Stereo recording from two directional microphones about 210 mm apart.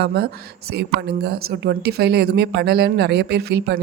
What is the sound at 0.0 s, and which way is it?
Speech, 50° right (ahead or behind).